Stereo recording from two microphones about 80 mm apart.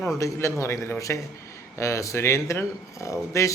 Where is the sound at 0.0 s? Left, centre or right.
Left.